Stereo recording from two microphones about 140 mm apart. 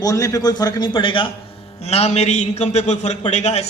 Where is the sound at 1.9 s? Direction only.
50° left (ahead or behind).